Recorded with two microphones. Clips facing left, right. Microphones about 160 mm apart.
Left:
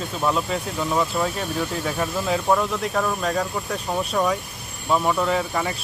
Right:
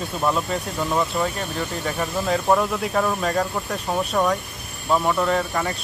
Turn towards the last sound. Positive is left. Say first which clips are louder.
# right 1 dB
turn(degrees=5)  # may be behind; listen again after turning